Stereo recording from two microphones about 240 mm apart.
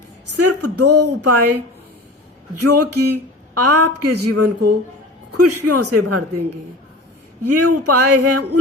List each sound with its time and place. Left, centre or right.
0.3 s speech: right
2.6 s speech: right
7.4 s speech: right